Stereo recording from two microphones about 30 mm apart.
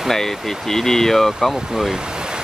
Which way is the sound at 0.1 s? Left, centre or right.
Centre.